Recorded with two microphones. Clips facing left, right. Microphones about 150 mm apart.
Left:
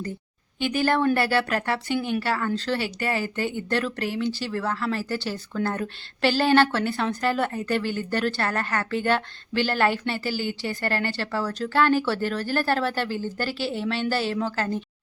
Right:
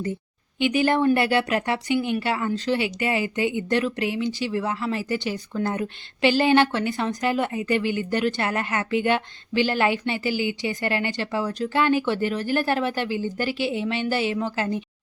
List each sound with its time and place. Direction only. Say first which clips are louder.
0.7 s speech: right 2 dB; 15° right (ahead or behind)